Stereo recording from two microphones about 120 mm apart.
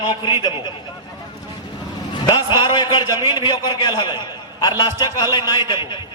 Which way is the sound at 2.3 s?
35° left (ahead or behind).